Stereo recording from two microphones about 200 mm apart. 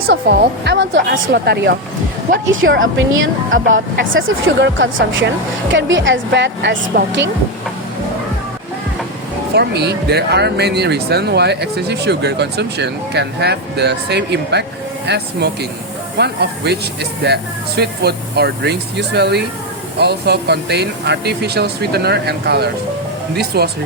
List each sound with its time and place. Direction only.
0.1 s speech: 55° right (ahead or behind)
2.5 s a woman's voice: 80° right; by 7.1 s 55° right (ahead or behind)
9.6 s speech: 55° right (ahead or behind)